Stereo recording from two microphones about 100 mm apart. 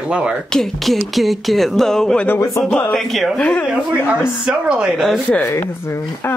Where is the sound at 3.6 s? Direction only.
10° right (ahead or behind).